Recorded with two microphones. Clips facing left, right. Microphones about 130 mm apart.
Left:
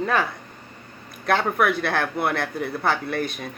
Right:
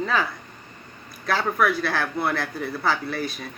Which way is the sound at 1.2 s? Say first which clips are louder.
Left 2 dB; 55° left (ahead or behind).